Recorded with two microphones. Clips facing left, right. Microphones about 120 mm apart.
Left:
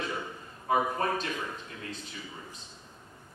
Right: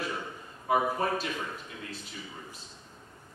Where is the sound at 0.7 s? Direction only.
5° right (ahead or behind).